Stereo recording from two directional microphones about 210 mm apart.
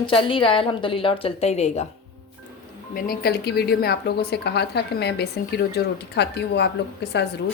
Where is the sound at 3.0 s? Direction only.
45° left (ahead or behind).